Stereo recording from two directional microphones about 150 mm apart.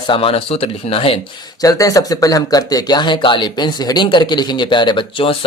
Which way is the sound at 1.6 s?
25° left (ahead or behind).